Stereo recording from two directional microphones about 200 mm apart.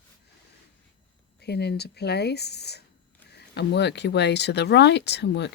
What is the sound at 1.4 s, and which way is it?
Speech, 55° left (ahead or behind).